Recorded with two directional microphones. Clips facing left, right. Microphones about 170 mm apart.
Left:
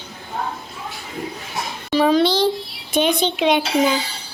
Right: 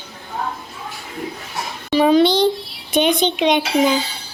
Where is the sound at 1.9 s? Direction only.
Centre (ahead or behind).